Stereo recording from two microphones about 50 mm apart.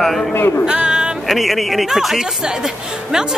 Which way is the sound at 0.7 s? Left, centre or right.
Centre.